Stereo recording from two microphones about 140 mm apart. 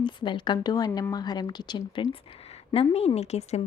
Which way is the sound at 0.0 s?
35° left (ahead or behind).